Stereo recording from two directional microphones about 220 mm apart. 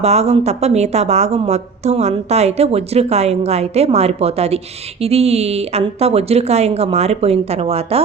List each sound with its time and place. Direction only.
0.0 s a woman's voice: 30° right (ahead or behind)